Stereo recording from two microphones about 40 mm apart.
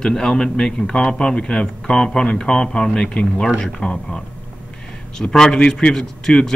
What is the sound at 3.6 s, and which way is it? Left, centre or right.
Speech, centre.